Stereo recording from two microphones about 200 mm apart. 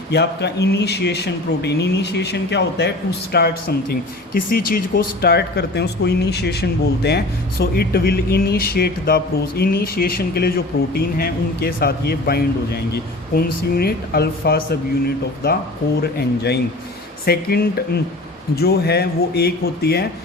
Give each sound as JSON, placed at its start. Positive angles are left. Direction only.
{"t": 0.1, "sound": "speech", "side_deg": 55}